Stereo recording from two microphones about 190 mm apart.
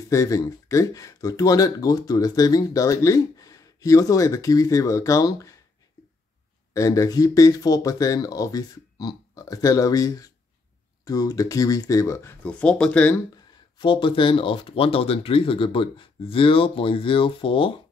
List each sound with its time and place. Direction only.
0.1 s speech: 15° left (ahead or behind)
6.7 s speech: 15° left (ahead or behind)
13.7 s speech: 25° left (ahead or behind)